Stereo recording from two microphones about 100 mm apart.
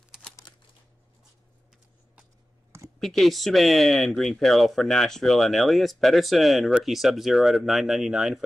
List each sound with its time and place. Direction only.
3.0 s speech: centre (ahead or behind)